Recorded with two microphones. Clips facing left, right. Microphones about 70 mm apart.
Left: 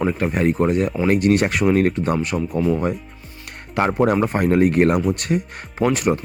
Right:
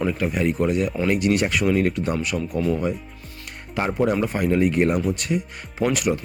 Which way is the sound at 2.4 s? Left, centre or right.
Centre.